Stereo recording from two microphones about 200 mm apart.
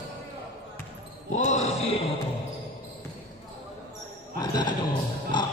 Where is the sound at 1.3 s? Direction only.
35° left (ahead or behind).